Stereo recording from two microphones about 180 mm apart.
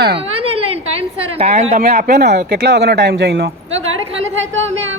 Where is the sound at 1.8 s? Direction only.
60° right (ahead or behind).